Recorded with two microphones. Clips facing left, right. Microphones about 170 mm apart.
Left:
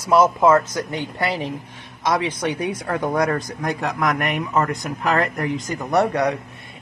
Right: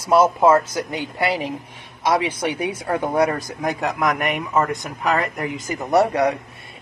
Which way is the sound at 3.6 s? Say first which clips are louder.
Right 2 dB; centre (ahead or behind).